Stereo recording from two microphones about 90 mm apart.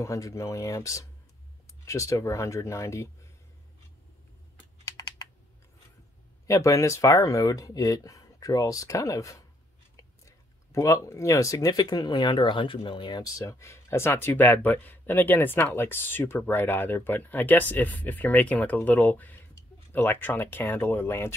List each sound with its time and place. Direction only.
0.0 s speech: 35° left (ahead or behind)
6.4 s speech: 35° left (ahead or behind); by 13.3 s 55° left (ahead or behind)
13.5 s speech: 30° left (ahead or behind)